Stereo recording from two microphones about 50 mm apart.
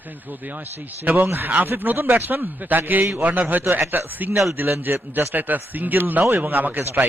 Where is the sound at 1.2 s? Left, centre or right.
Right.